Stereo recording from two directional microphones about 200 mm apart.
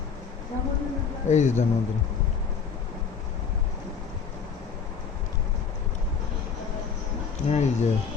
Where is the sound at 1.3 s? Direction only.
35° left (ahead or behind).